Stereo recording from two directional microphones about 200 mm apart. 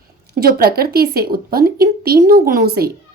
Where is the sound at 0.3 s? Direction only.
50° right (ahead or behind).